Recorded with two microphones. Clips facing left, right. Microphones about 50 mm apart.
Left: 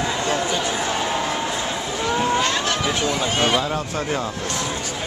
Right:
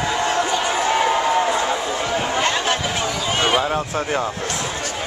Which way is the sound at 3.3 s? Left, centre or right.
Centre.